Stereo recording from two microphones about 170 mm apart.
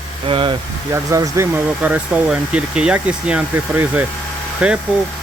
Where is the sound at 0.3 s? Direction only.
30° right (ahead or behind).